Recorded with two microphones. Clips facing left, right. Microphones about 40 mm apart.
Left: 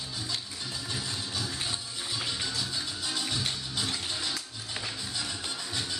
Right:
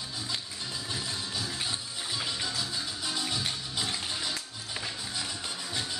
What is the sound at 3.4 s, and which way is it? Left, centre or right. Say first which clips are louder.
Music: even; centre.